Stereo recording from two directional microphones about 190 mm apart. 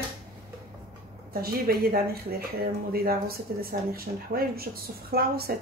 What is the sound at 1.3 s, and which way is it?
Speech, 50° right (ahead or behind).